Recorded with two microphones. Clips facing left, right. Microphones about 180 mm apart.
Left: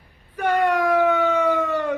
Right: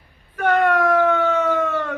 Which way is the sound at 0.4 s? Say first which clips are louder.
Right 2 dB; 15° left (ahead or behind).